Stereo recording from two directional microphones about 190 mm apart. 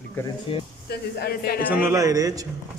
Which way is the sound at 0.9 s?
55° left (ahead or behind).